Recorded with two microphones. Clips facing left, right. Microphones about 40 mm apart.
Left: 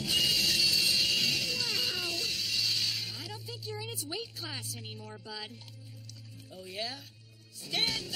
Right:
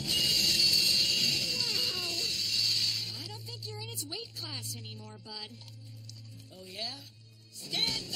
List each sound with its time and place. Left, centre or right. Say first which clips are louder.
0.0 s a sound: left 1 dB; centre
4.7 s speech: left 2 dB; centre
5.2 s music: left 2 dB; centre
6.5 s music: left 3 dB; centre